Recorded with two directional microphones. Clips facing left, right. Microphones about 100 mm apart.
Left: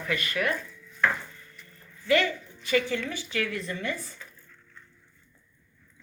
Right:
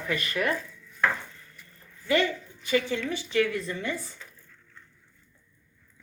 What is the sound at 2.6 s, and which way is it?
Speech, 25° right (ahead or behind).